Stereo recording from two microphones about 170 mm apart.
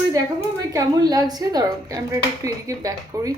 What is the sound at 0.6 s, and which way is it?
Speech, 20° right (ahead or behind).